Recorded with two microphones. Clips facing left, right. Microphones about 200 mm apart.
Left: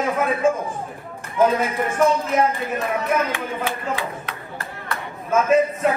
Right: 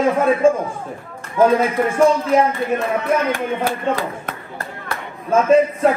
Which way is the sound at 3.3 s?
45° right (ahead or behind).